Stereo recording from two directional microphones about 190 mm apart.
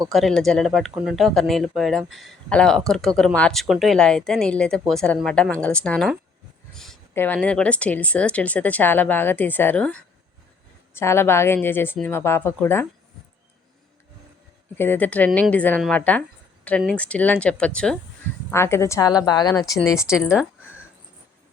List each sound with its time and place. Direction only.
0.1 s speech: centre (ahead or behind)
14.8 s a woman's voice: 10° left (ahead or behind)